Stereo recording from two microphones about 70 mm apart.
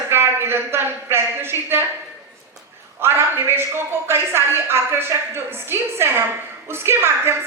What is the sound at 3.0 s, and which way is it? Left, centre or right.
A woman's voice, right.